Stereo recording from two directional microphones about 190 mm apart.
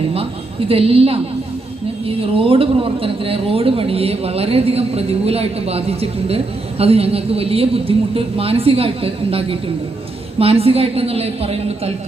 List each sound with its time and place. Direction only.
0.7 s speech: 30° right (ahead or behind)
10.3 s speech: 30° right (ahead or behind)